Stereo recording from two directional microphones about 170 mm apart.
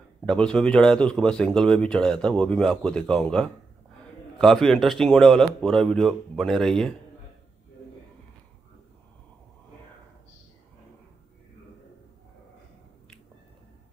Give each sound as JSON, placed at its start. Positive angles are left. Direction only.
{"t": 0.2, "sound": "speech", "side_deg": 5}